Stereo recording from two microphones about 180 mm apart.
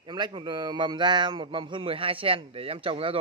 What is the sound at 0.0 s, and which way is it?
A man's voice, 25° right (ahead or behind).